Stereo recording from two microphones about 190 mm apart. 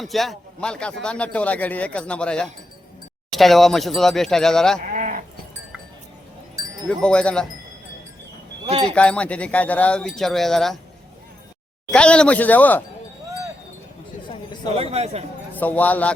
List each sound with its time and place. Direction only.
0.0 s speech: centre (ahead or behind)
4.9 s sheep: 40° right (ahead or behind)
7.0 s speech: 5° left (ahead or behind)
9.0 s speech: 5° left (ahead or behind)
11.9 s speech: 5° left (ahead or behind)
14.8 s speech: 30° right (ahead or behind)
15.5 s speech: 10° left (ahead or behind)